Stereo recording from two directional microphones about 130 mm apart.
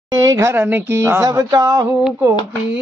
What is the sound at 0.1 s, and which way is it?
Speech, 25° right (ahead or behind).